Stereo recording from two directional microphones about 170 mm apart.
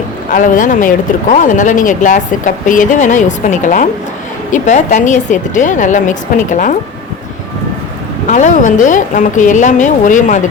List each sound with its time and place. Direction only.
0.3 s speech: 50° left (ahead or behind)
8.3 s speech: 45° left (ahead or behind)